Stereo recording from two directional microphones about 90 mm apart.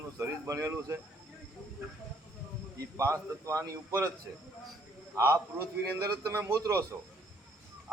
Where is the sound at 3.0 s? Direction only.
35° right (ahead or behind).